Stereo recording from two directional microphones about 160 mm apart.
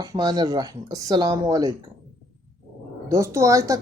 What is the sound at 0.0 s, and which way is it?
Speech, 25° right (ahead or behind).